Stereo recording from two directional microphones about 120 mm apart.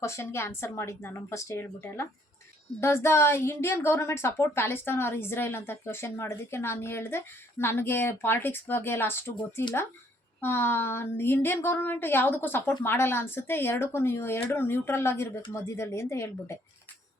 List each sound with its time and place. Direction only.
0.0 s a woman's voice: 25° left (ahead or behind)
10.4 s a woman's voice: 20° left (ahead or behind)